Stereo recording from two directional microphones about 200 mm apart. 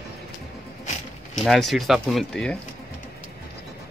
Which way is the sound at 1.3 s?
Centre (ahead or behind).